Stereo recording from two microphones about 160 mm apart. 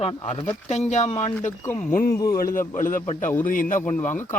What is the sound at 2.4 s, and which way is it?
A man's voice, 60° left (ahead or behind).